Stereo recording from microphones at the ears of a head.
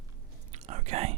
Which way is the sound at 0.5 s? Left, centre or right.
Right.